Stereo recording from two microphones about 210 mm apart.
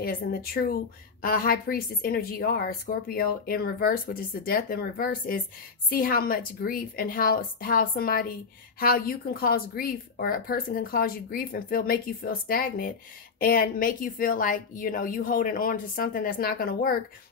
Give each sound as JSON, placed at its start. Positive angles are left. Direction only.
{"t": 0.0, "sound": "a woman's voice", "side_deg": 45}